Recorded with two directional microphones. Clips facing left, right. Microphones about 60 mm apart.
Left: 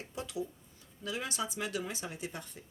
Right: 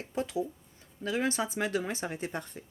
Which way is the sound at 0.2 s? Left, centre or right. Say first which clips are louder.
Right 7 dB; right.